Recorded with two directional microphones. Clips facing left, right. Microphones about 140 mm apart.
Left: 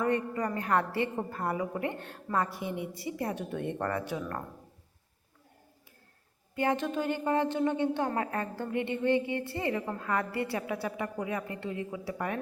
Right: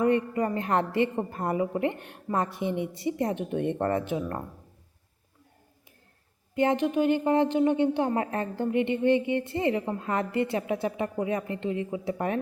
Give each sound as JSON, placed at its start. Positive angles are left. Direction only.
{"t": 0.0, "sound": "a woman's voice", "side_deg": -20}
{"t": 6.6, "sound": "a woman's voice", "side_deg": -20}